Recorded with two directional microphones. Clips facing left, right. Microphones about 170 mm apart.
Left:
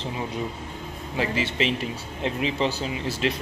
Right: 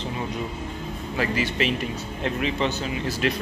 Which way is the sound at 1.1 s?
25° left (ahead or behind).